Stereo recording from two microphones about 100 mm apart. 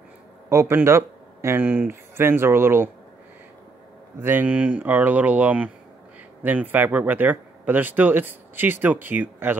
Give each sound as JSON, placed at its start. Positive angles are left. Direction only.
{"t": 0.5, "sound": "speech", "side_deg": -25}
{"t": 4.2, "sound": "speech", "side_deg": -20}